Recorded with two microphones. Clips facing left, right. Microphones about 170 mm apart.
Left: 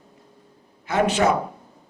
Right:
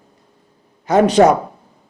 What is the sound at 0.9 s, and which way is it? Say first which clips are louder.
Speech: right 8 dB; 40° right (ahead or behind).